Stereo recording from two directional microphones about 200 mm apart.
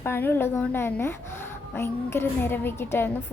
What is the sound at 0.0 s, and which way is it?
A woman's voice, 10° left (ahead or behind).